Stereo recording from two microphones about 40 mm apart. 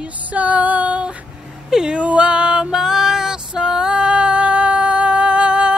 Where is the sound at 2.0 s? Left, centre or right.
Right.